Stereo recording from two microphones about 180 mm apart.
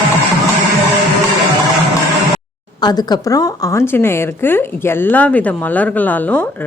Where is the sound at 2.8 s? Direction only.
20° left (ahead or behind).